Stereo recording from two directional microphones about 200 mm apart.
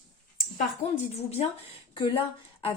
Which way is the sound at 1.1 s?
30° left (ahead or behind).